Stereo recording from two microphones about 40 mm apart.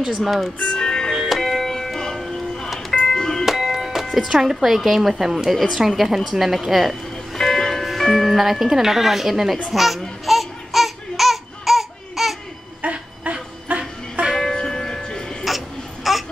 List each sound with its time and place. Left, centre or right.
0.1 s a woman's voice: centre
0.7 s music: centre
1.2 s music: centre
3.4 s doorbell: centre
4.3 s a woman's voice: centre
7.3 s music: centre
8.4 s a woman's voice: centre
9.7 s laughter: centre
12.8 s music: right
14.5 s music: centre
15.4 s a sound: centre